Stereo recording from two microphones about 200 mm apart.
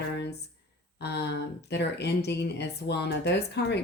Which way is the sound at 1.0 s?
55° left (ahead or behind).